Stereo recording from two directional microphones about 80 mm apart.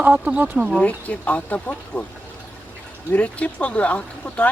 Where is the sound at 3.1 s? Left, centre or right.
Centre.